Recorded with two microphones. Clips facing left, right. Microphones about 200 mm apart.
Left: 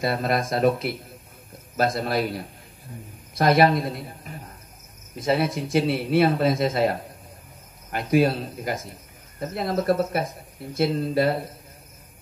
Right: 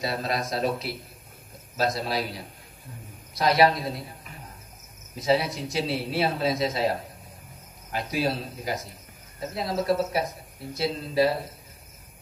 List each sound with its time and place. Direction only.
0.0 s a man's voice: 55° left (ahead or behind)
5.1 s a man's voice: 55° left (ahead or behind)